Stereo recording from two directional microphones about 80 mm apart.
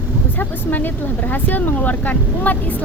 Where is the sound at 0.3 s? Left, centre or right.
Left.